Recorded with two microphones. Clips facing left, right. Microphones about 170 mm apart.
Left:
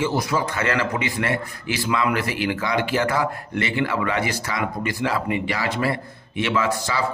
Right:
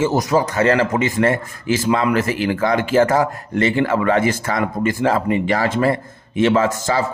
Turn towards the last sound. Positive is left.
turn(degrees=-45)  # may be behind; listen again after turning